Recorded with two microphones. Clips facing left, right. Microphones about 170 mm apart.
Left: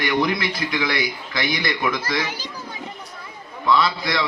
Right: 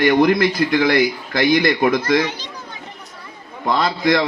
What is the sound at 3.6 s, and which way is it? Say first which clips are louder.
Speech: right 2 dB; 50° right (ahead or behind).